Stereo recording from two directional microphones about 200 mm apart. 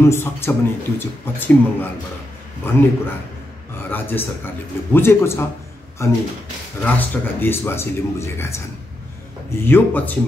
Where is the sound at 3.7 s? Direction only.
10° left (ahead or behind).